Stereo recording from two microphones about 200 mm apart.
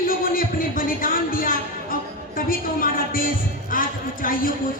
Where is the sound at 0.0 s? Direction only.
45° left (ahead or behind).